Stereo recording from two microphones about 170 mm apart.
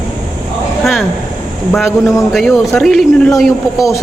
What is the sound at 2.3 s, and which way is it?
A man's voice, centre (ahead or behind).